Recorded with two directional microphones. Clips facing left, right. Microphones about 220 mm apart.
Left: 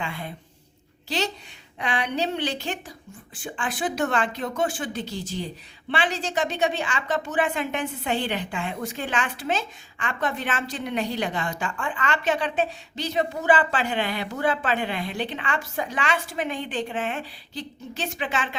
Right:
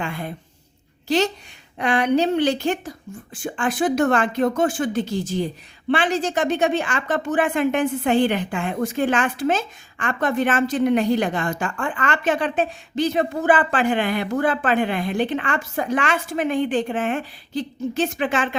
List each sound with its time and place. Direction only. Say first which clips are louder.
0.0 s a woman's voice: right 5 dB; 50° right (ahead or behind)